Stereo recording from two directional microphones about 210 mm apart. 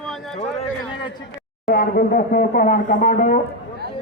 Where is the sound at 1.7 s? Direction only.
45° left (ahead or behind).